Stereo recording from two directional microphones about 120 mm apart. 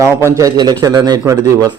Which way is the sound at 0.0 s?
25° right (ahead or behind).